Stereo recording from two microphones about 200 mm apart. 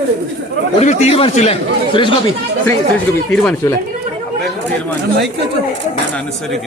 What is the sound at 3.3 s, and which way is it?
Speech, 5° left (ahead or behind).